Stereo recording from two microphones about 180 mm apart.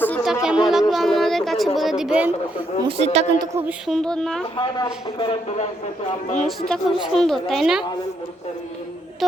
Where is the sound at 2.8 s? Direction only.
35° right (ahead or behind).